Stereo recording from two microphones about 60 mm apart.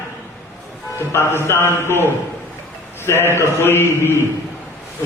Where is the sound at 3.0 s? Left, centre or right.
Left.